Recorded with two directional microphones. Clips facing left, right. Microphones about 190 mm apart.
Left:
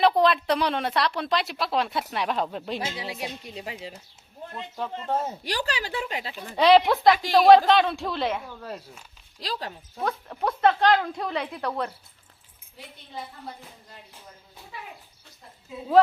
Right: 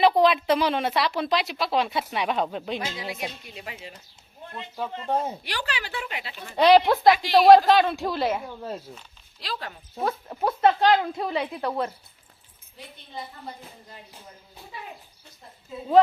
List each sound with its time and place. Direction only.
0.2 s speech: centre (ahead or behind)
2.9 s a woman's voice: 30° left (ahead or behind)
4.5 s speech: 5° right (ahead or behind)
5.0 s speech: 15° right (ahead or behind)
5.4 s speech: 40° left (ahead or behind)
6.6 s speech: centre (ahead or behind)
8.4 s speech: 25° right (ahead or behind)
9.4 s speech: 35° left (ahead or behind)
10.0 s speech: 5° right (ahead or behind)